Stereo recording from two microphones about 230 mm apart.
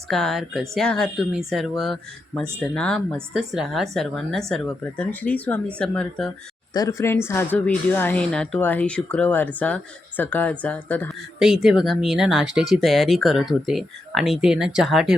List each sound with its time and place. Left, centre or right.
0.1 s speech: centre
6.7 s speech: centre